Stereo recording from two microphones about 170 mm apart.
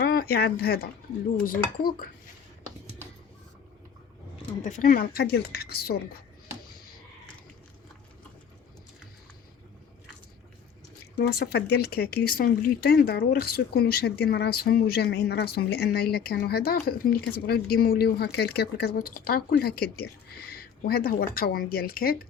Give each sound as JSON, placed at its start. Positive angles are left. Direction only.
{"t": 0.0, "sound": "speech", "side_deg": 65}
{"t": 4.8, "sound": "speech", "side_deg": 60}
{"t": 11.2, "sound": "speech", "side_deg": 70}